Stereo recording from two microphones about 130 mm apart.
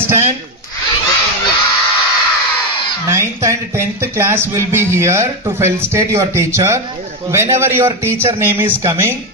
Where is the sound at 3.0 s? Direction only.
20° right (ahead or behind).